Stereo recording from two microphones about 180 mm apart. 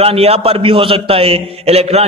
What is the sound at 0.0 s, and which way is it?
A man's voice, 35° right (ahead or behind).